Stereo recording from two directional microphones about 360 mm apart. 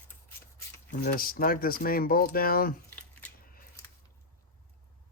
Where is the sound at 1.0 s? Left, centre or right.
Left.